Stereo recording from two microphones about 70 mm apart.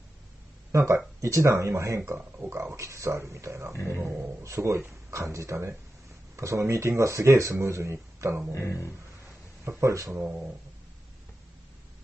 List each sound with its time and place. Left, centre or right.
0.7 s speech: right
8.5 s speech: left
9.7 s speech: right